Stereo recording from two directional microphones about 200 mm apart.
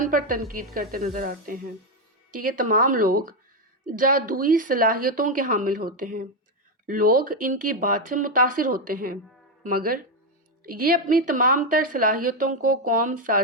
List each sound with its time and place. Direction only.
0.0 s a woman's voice: 45° right (ahead or behind)